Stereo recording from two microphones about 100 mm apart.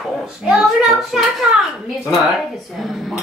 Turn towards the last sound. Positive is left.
turn(degrees=0)  # may be behind; listen again after turning